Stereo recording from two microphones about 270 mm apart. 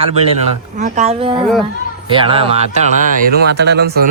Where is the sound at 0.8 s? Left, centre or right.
Right.